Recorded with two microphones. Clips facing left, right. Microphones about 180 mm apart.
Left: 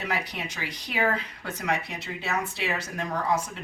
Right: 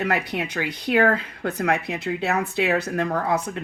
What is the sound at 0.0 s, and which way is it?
Speech, 60° right (ahead or behind).